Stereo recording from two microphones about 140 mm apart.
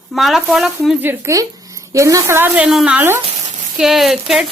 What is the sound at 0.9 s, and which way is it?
A woman's voice, 15° right (ahead or behind).